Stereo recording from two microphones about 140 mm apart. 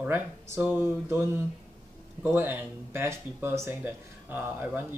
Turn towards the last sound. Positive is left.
turn(degrees=-15)  # may be behind; listen again after turning